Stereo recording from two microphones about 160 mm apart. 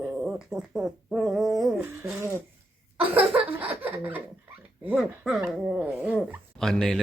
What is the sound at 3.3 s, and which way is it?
A man's voice, 10° right (ahead or behind).